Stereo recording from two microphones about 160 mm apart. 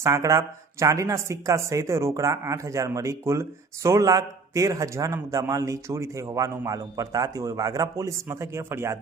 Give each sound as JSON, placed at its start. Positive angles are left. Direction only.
{"t": 0.0, "sound": "a man's voice", "side_deg": -20}